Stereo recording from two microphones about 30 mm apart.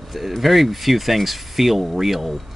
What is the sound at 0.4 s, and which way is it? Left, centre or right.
Speech, centre.